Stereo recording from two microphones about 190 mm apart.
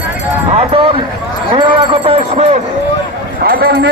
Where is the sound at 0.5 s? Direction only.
30° right (ahead or behind).